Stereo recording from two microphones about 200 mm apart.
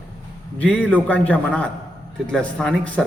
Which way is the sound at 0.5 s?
5° left (ahead or behind).